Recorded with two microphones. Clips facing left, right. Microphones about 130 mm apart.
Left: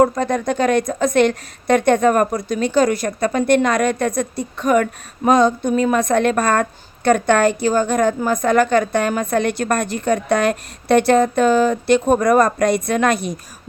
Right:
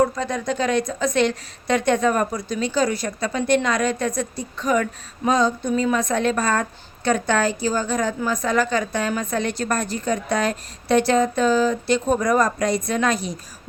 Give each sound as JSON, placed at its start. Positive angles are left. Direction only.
{"t": 0.0, "sound": "a woman's voice", "side_deg": 55}